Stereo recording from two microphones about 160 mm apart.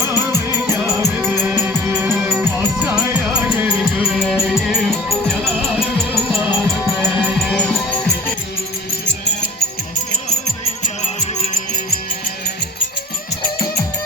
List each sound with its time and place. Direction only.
0.1 s music: 15° right (ahead or behind); by 7.8 s 10° left (ahead or behind)